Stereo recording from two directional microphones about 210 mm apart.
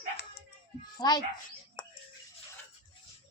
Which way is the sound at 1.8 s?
20° left (ahead or behind).